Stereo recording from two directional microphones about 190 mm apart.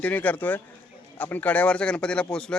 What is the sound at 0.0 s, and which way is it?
Speech, 10° left (ahead or behind).